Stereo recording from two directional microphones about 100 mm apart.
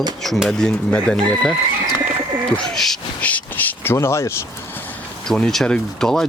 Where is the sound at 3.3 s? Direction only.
20° left (ahead or behind).